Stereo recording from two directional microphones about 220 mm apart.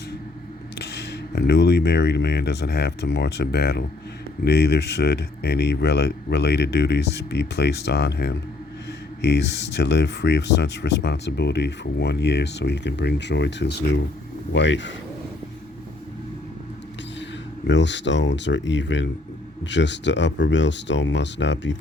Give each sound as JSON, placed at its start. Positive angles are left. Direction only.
{"t": 0.8, "sound": "speech", "side_deg": 50}
{"t": 17.7, "sound": "speech", "side_deg": 55}